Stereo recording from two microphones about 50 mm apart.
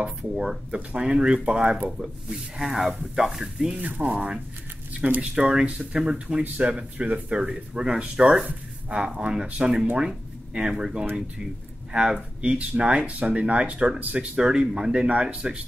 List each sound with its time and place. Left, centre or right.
0.7 s speech: right
3.7 s speech: right
4.9 s a sound: right
5.2 s speech: centre
5.7 s speech: right
6.0 s speech: centre
6.4 s speech: right
6.7 s speech: centre
14.3 s speech: centre